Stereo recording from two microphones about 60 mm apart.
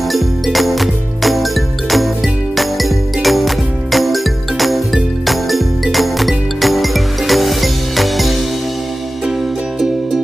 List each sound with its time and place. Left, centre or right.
0.1 s music: centre